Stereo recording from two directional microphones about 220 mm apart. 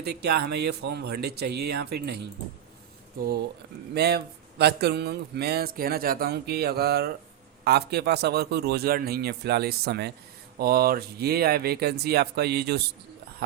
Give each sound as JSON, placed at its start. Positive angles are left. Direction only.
{"t": 0.0, "sound": "speech", "side_deg": -45}
{"t": 3.9, "sound": "speech", "side_deg": -45}